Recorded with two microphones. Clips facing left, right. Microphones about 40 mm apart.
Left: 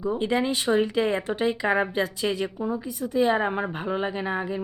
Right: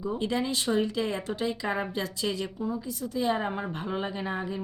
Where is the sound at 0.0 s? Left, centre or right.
Centre.